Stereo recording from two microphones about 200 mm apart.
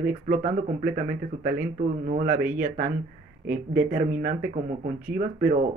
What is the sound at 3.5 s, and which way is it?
Speech, 50° right (ahead or behind).